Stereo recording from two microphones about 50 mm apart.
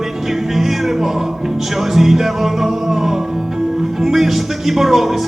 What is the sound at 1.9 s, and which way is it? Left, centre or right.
Music, centre.